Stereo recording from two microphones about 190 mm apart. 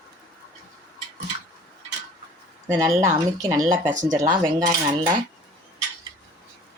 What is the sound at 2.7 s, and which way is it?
Speech, 15° right (ahead or behind).